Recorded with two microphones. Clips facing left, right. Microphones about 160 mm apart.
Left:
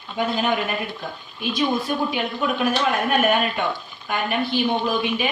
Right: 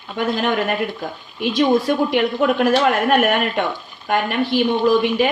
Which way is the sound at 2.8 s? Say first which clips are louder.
Right 4 dB; 75° right (ahead or behind).